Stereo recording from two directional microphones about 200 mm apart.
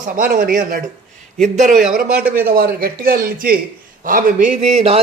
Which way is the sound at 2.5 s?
50° right (ahead or behind).